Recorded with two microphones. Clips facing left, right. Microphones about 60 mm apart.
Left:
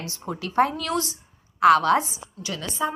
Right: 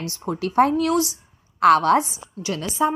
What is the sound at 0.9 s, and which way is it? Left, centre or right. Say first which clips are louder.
Speech: right 5 dB; left.